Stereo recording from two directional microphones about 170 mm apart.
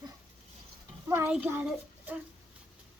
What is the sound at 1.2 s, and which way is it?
Speech, 10° right (ahead or behind).